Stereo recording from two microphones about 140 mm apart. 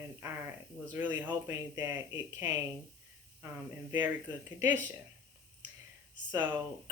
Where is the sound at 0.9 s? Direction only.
10° right (ahead or behind).